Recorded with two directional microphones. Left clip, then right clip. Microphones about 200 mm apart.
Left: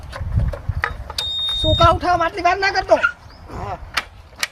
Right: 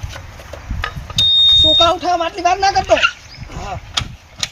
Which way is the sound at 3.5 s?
10° left (ahead or behind).